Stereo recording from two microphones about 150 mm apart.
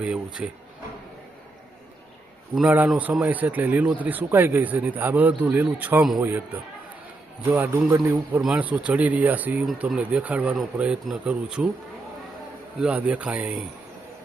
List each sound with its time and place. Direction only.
0.4 s speech: 5° right (ahead or behind)
2.6 s a man's voice: 10° right (ahead or behind)
12.8 s a man's voice: 10° right (ahead or behind)